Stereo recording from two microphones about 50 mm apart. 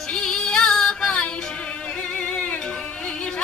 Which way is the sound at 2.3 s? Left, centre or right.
Left.